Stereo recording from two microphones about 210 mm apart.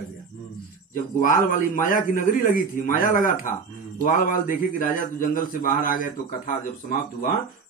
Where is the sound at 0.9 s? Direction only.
40° left (ahead or behind).